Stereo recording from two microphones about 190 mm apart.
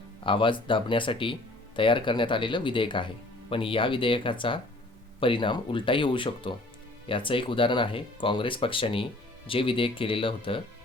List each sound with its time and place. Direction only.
0.3 s speech: 25° left (ahead or behind)